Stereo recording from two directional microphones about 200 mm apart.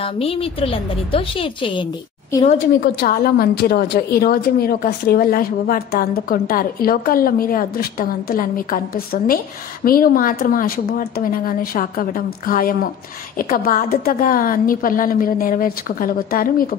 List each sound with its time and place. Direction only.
0.0 s a woman's voice: 30° left (ahead or behind)
2.8 s a woman's voice: 50° left (ahead or behind)